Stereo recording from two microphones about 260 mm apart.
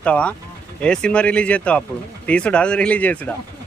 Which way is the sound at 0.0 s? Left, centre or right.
Centre.